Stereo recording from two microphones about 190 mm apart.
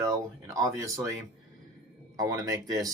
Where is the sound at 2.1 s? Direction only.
20° right (ahead or behind).